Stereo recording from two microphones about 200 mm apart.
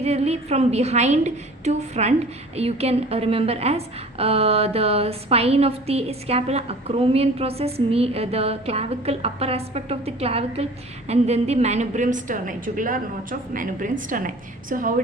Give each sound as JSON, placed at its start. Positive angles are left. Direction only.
{"t": 0.0, "sound": "a woman's voice", "side_deg": -30}